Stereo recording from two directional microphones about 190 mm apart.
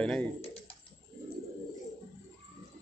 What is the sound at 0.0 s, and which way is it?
Speech, 5° left (ahead or behind).